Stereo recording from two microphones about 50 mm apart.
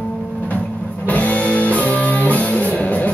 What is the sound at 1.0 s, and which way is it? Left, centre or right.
Music, left.